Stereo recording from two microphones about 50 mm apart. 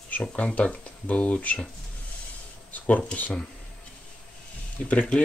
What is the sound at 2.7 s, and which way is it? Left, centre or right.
Speech, left.